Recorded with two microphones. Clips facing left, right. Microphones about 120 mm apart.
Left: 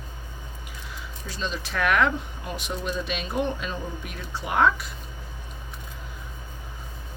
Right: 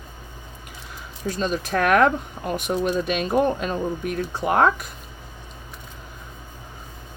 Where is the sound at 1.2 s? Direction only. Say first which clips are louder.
Right 8 dB; 45° right (ahead or behind).